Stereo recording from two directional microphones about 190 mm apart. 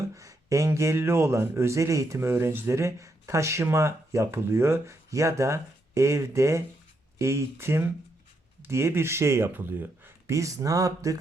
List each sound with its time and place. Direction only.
0.2 s a man's voice: 15° right (ahead or behind)